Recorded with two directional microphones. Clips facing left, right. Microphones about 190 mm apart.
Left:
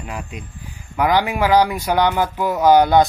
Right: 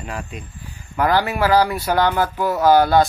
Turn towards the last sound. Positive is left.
turn(degrees=20)  # may be behind; listen again after turning